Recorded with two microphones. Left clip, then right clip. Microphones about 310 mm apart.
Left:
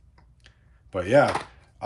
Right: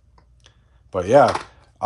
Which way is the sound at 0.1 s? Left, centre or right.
Centre.